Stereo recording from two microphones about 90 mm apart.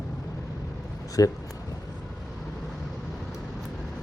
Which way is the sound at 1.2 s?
40° left (ahead or behind).